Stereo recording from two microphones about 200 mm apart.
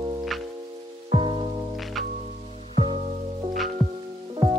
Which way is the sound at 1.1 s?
25° right (ahead or behind).